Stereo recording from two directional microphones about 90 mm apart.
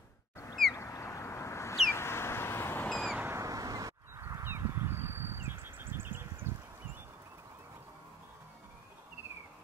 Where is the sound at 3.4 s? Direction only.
40° right (ahead or behind); by 6.5 s 25° right (ahead or behind).